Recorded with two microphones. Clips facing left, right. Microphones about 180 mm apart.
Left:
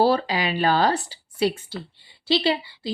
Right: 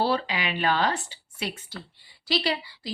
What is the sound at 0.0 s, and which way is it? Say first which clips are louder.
Speech: left 6 dB; 40° left (ahead or behind).